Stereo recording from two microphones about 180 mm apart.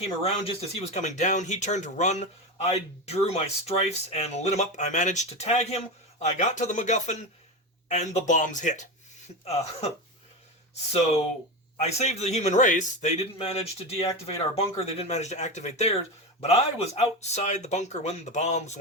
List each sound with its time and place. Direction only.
0.0 s a man's voice: 35° left (ahead or behind)
11.8 s a man's voice: 35° left (ahead or behind)